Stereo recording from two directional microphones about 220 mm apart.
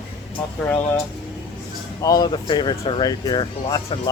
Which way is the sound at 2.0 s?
15° left (ahead or behind).